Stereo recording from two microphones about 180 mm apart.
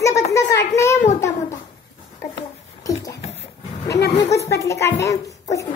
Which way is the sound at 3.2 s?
35° left (ahead or behind).